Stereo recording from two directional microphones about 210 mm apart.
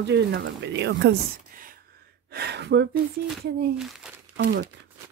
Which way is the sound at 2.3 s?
50° right (ahead or behind).